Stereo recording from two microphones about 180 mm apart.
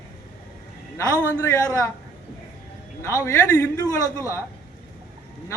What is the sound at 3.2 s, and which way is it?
Speech, 15° left (ahead or behind).